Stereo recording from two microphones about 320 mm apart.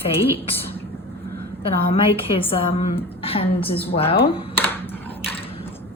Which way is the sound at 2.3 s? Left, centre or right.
Centre.